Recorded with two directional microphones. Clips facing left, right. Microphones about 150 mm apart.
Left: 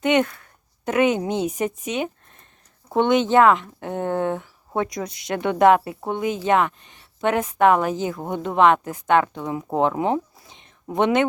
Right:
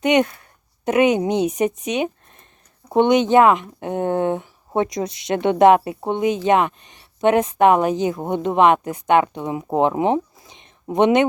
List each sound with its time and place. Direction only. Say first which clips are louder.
0.0 s speech: right 2 dB; 15° right (ahead or behind)